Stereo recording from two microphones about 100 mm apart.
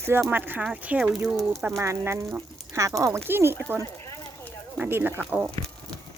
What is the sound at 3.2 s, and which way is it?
Speech, 20° right (ahead or behind).